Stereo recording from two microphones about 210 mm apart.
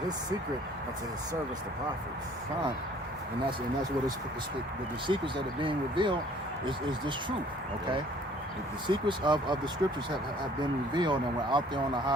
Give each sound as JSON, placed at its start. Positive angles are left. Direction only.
{"t": 5.0, "sound": "speech", "side_deg": -25}
{"t": 8.9, "sound": "speech", "side_deg": -20}
{"t": 10.6, "sound": "speech", "side_deg": -20}